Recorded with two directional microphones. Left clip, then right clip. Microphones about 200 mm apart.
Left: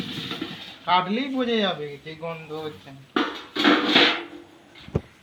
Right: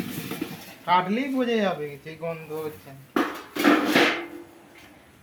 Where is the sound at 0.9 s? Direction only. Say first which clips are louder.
Even; 5° right (ahead or behind).